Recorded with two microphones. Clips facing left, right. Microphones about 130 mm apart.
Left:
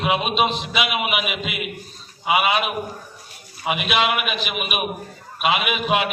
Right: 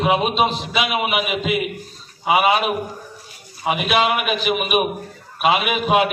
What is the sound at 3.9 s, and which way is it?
A man's voice, 40° right (ahead or behind).